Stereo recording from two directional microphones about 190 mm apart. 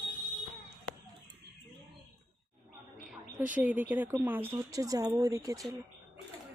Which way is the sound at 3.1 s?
10° right (ahead or behind).